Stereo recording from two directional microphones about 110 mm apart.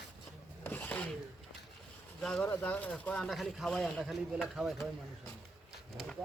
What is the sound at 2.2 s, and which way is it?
A man's voice, 5° left (ahead or behind).